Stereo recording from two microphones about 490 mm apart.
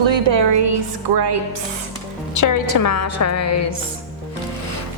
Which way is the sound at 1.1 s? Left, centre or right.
Right.